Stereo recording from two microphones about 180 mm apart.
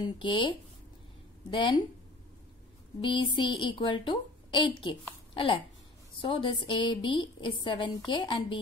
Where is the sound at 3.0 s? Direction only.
25° left (ahead or behind).